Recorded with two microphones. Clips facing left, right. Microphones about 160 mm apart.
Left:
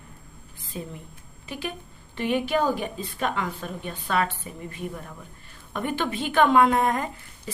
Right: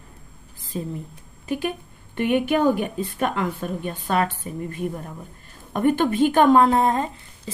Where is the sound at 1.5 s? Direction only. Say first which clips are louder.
Right 8 dB; 50° right (ahead or behind).